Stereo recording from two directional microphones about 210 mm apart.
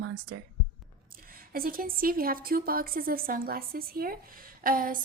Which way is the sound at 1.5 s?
45° right (ahead or behind).